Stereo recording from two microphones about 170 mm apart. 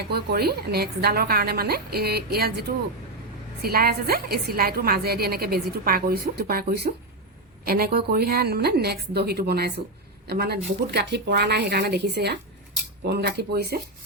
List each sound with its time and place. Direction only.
0.1 s a woman's voice: 65° right (ahead or behind)
13.1 s a woman's voice: 70° right (ahead or behind)